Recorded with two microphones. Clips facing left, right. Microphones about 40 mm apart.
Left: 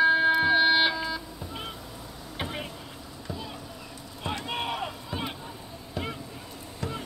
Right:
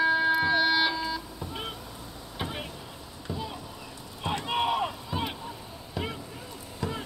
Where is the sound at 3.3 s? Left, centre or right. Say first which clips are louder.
Right 2 dB; right.